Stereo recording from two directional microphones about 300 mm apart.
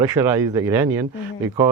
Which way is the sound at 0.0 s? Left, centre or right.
Centre.